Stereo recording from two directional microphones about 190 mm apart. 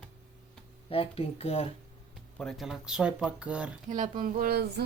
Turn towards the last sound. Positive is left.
turn(degrees=-55)  # may be behind; listen again after turning